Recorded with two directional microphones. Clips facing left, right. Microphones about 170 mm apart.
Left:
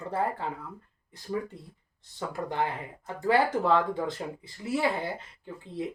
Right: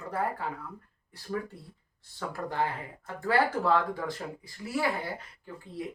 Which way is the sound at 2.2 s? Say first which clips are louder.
Left 1 dB; 20° left (ahead or behind).